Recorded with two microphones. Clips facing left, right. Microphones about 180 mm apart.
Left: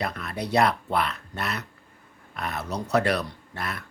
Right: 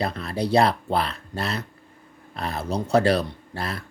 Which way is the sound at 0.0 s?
30° right (ahead or behind).